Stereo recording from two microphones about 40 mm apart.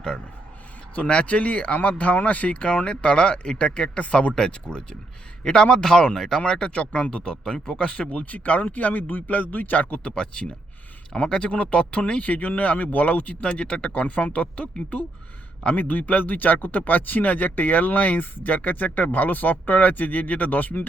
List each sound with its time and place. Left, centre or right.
0.9 s speech: left
4.4 s speech: left
6.4 s speech: left
8.1 s speech: left
10.2 s speech: left
13.5 s speech: left